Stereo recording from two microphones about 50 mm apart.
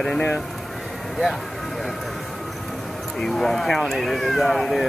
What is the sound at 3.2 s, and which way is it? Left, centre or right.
Speech, centre.